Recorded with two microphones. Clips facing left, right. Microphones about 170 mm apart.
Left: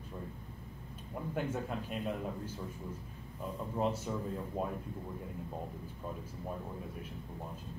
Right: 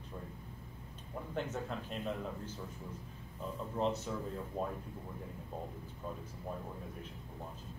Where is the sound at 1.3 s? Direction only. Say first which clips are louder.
Left 2 dB; 10° left (ahead or behind).